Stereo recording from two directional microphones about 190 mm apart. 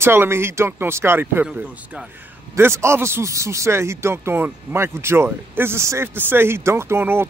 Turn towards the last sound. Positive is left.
turn(degrees=-10)  # may be behind; listen again after turning